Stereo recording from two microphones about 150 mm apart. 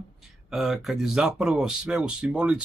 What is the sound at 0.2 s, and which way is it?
Speech, centre (ahead or behind).